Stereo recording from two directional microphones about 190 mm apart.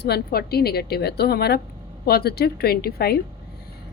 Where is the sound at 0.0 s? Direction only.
55° left (ahead or behind).